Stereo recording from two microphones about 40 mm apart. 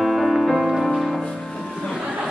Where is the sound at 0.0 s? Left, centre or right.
Centre.